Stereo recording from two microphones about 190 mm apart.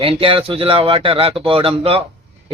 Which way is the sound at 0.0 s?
30° right (ahead or behind).